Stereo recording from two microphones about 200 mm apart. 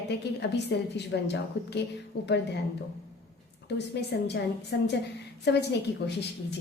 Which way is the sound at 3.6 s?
55° left (ahead or behind).